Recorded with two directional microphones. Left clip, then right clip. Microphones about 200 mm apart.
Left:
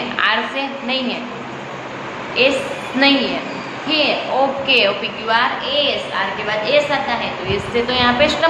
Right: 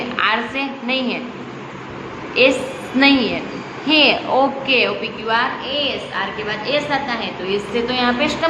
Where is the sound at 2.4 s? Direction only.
20° right (ahead or behind).